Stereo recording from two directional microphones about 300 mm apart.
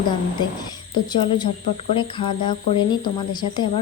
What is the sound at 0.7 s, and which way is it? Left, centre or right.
Speech, centre.